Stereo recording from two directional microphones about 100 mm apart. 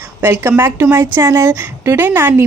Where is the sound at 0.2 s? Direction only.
20° right (ahead or behind).